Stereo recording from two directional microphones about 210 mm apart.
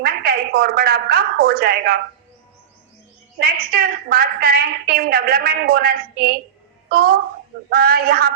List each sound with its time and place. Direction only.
0.0 s a woman's voice: 45° right (ahead or behind)
3.3 s a woman's voice: 45° right (ahead or behind)